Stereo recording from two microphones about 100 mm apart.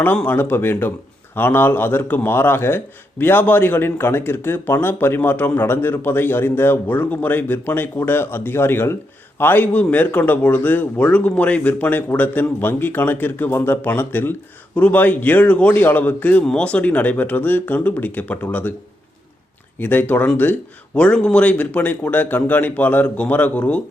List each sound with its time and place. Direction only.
0.3 s a man's voice: 20° left (ahead or behind)
19.8 s speech: 20° left (ahead or behind)